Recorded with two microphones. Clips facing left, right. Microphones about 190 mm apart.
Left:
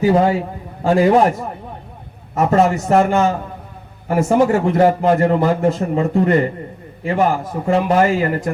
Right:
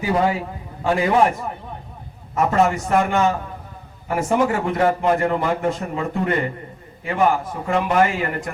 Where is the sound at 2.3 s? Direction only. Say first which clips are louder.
Left 3 dB; 40° left (ahead or behind).